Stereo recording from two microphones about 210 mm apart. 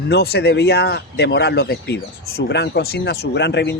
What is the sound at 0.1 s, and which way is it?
Speech, 50° left (ahead or behind).